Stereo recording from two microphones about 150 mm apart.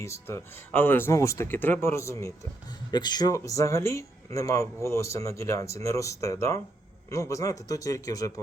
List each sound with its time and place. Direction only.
0.0 s speech: 20° left (ahead or behind)